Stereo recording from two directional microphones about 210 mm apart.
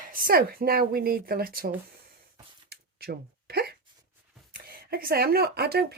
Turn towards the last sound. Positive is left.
turn(degrees=-50)  # may be behind; listen again after turning